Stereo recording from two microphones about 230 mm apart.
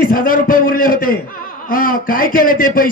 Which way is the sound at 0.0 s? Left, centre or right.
Left.